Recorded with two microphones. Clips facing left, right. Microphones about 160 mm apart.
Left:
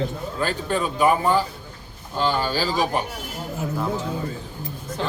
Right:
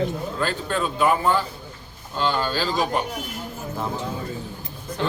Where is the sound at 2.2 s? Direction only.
10° left (ahead or behind).